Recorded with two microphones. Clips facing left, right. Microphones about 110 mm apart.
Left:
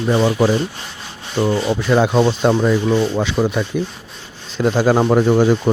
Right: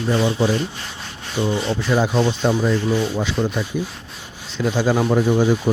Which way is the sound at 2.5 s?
90° left.